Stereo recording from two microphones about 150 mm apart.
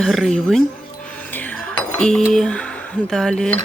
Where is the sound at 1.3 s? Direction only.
10° left (ahead or behind).